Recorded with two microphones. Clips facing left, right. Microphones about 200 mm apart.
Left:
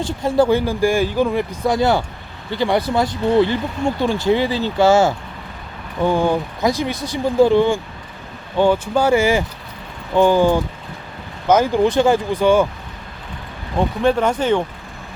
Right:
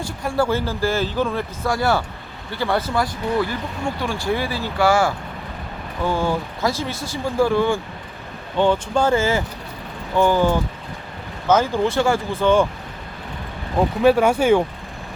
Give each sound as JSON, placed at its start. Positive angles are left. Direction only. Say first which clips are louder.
{"t": 0.0, "sound": "speech", "louder": "left 5 dB", "side_deg": 20}
{"t": 8.5, "sound": "speech", "louder": "left 2 dB", "side_deg": 10}
{"t": 13.7, "sound": "speech", "louder": "right 1 dB", "side_deg": -5}